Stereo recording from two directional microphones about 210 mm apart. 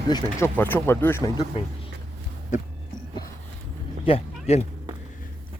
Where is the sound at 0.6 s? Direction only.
10° left (ahead or behind).